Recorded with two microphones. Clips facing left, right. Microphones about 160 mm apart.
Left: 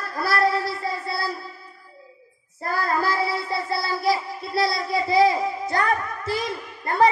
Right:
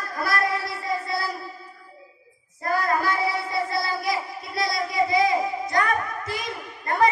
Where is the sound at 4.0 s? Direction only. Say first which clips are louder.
Left 4 dB; 30° left (ahead or behind).